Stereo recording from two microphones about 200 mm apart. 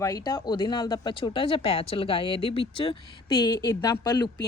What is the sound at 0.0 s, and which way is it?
Speech, 15° left (ahead or behind).